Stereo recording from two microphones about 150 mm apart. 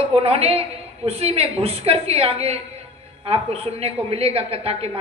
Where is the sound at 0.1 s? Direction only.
40° right (ahead or behind).